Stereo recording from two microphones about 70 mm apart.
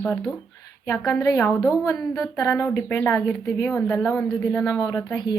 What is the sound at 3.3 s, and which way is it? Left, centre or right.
A woman's voice, left.